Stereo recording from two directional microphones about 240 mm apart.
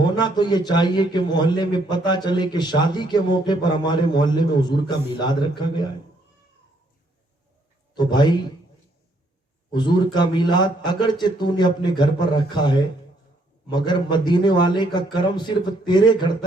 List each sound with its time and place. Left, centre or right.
0.0 s a man's voice: centre
7.9 s a man's voice: centre
9.7 s a man's voice: centre